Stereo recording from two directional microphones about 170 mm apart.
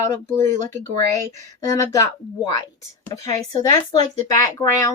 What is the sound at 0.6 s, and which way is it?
Speech, 45° right (ahead or behind).